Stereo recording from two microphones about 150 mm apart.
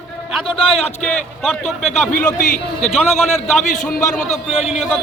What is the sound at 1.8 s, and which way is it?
A man's voice, 55° left (ahead or behind).